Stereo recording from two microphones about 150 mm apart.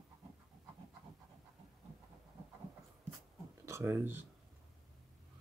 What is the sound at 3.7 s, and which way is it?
Speech, 15° right (ahead or behind).